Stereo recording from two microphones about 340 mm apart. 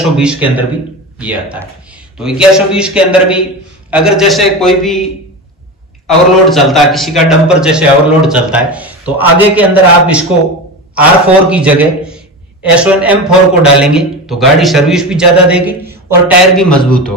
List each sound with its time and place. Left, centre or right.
0.2 s a man's voice: centre
6.0 s a man's voice: centre